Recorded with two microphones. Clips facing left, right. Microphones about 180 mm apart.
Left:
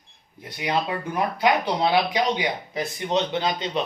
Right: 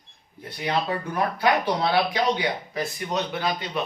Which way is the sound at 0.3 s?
15° left (ahead or behind).